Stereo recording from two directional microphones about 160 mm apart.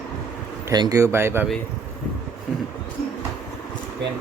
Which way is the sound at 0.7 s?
25° right (ahead or behind).